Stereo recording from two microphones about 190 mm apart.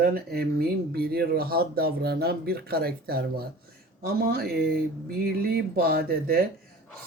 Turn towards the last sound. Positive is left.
turn(degrees=-55)  # may be behind; listen again after turning